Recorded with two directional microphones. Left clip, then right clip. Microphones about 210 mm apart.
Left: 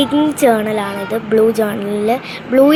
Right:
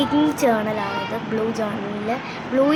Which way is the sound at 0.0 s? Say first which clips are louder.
Left 6 dB; 15° left (ahead or behind).